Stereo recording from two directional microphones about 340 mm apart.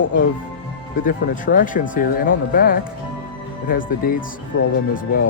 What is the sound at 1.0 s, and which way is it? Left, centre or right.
Speech, left.